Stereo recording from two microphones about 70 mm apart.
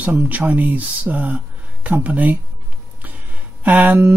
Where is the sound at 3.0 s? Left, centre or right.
Right.